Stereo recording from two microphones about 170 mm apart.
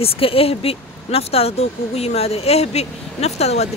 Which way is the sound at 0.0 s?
35° left (ahead or behind).